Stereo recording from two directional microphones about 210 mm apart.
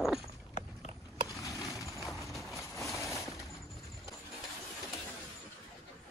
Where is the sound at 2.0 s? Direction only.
Centre (ahead or behind).